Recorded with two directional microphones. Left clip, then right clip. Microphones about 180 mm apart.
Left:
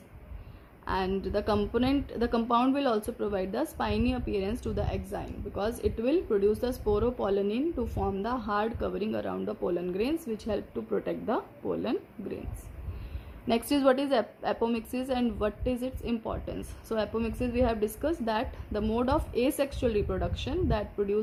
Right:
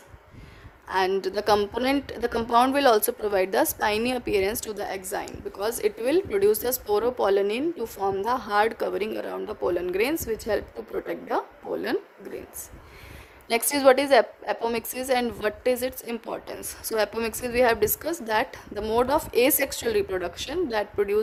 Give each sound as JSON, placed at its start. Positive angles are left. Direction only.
{"t": 0.9, "sound": "a woman's voice", "side_deg": -50}
{"t": 13.5, "sound": "a woman's voice", "side_deg": -45}